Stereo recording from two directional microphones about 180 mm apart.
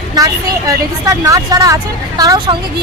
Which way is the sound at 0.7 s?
20° right (ahead or behind).